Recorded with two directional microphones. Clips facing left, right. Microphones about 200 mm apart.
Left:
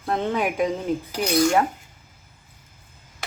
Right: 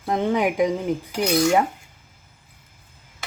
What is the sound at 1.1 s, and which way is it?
Cutlery, centre (ahead or behind).